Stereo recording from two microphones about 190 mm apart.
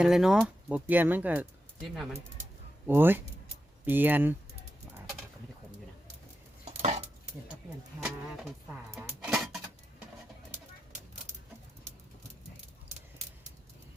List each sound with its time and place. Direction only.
0.0 s speech: centre (ahead or behind)
2.8 s speech: 10° right (ahead or behind)
6.7 s dishes: 35° right (ahead or behind)
9.0 s dishes: 5° right (ahead or behind)